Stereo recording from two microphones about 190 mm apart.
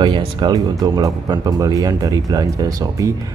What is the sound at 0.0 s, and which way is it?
Speech, 25° right (ahead or behind).